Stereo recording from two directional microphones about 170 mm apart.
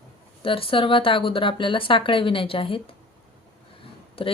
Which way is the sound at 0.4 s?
30° left (ahead or behind).